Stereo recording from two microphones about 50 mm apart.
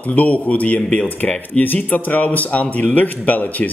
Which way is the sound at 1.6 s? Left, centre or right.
Left.